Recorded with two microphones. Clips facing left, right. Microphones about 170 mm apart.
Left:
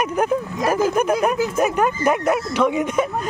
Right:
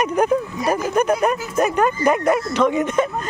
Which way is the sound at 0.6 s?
90° left.